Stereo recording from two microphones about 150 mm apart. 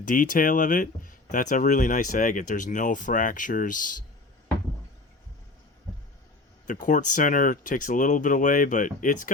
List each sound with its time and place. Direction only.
0.0 s speech: 65° left (ahead or behind)
6.7 s speech: 60° left (ahead or behind)